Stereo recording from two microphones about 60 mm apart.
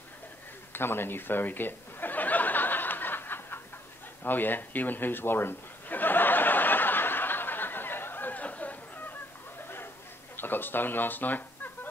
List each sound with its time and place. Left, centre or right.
0.7 s chuckle: left
4.2 s a sound: left
10.3 s speech: left